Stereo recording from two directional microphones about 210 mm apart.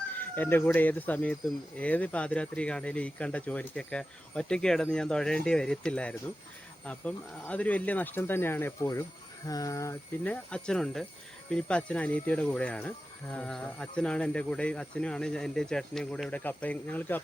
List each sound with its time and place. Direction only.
0.2 s speech: 10° left (ahead or behind)